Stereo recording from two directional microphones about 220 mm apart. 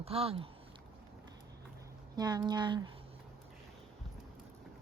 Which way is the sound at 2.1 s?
20° right (ahead or behind).